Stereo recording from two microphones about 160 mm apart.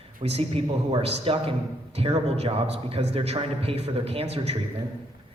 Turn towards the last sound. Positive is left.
turn(degrees=-40)  # may be behind; listen again after turning